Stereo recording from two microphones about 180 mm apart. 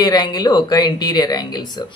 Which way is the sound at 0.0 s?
25° left (ahead or behind).